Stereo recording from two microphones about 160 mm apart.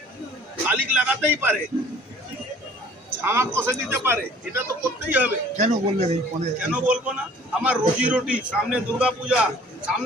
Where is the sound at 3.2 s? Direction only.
15° right (ahead or behind).